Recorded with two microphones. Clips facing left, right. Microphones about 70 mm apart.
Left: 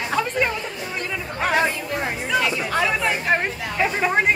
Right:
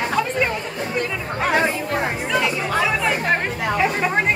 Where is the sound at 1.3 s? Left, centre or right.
Centre.